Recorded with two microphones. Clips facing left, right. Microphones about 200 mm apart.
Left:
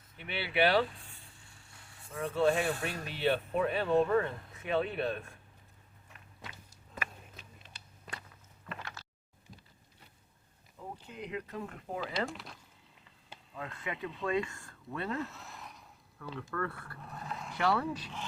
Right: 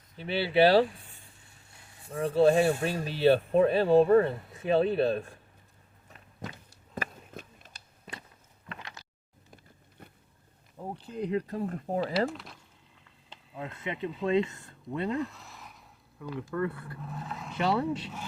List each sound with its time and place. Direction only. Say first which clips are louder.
0.2 s speech: right 7 dB; 30° right (ahead or behind)
2.1 s speech: right 7 dB; 35° right (ahead or behind)
6.5 s biting: right 8 dB; 35° right (ahead or behind)
7.3 s a sound: right 8 dB; 45° right (ahead or behind)
8.8 s a sound: even; 15° right (ahead or behind)
10.0 s vehicle: right 11 dB; 55° right (ahead or behind)
11.0 s speech: right 11 dB; 35° right (ahead or behind)
13.6 s speech: right 5 dB; 25° right (ahead or behind)
15.2 s a sound: right 5 dB; centre (ahead or behind)
16.2 s speech: right 6 dB; 15° right (ahead or behind)
17.1 s speech: right 2 dB; centre (ahead or behind)
17.5 s speech: right 3 dB; 20° right (ahead or behind)